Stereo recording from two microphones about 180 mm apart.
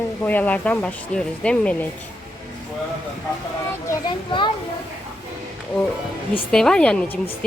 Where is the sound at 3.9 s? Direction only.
25° left (ahead or behind).